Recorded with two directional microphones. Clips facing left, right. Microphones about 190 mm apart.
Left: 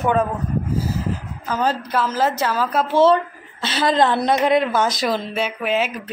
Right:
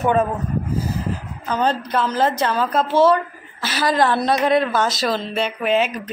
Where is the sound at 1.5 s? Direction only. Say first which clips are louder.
Right 1 dB; 5° left (ahead or behind).